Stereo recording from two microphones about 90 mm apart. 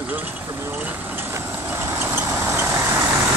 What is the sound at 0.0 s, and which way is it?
Vehicle, 20° right (ahead or behind).